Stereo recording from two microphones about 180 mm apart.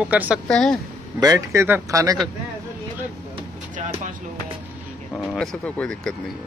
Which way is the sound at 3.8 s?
45° right (ahead or behind).